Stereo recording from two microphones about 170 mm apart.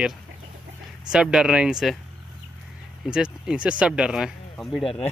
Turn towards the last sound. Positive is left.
turn(degrees=0)  # may be behind; listen again after turning